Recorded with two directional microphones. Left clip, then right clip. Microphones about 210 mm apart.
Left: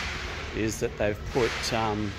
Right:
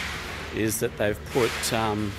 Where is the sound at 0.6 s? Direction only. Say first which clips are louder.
Right 2 dB; 20° right (ahead or behind).